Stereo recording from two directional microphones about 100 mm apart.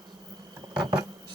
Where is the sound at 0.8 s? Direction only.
45° right (ahead or behind).